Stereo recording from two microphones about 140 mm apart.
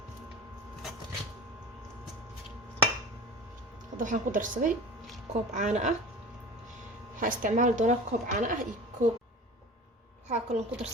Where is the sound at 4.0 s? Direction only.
65° right (ahead or behind).